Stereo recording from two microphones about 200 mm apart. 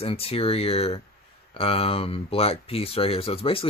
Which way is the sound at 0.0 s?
30° left (ahead or behind).